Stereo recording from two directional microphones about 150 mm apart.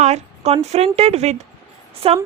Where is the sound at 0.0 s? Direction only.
45° right (ahead or behind).